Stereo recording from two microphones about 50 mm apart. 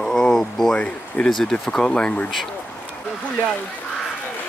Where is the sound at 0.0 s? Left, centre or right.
Centre.